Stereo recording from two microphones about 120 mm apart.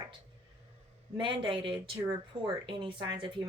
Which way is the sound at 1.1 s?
40° right (ahead or behind).